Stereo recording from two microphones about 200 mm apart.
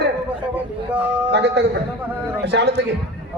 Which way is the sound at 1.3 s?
55° right (ahead or behind).